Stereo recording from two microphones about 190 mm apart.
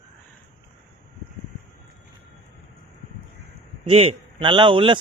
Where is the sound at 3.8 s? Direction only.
30° right (ahead or behind).